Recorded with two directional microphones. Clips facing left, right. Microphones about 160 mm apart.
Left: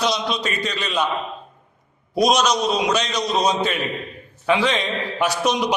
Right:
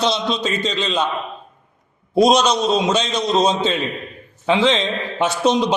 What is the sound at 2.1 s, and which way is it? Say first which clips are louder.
A man's voice: right 4 dB; 25° right (ahead or behind).